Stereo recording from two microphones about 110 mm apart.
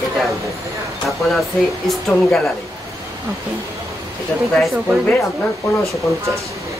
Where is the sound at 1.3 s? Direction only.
Centre (ahead or behind).